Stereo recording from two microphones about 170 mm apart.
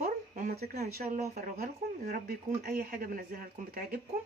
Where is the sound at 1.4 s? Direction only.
55° right (ahead or behind).